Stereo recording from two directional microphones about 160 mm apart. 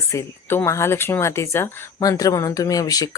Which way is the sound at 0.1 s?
20° left (ahead or behind).